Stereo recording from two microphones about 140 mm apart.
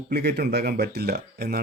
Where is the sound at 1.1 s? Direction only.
90° right.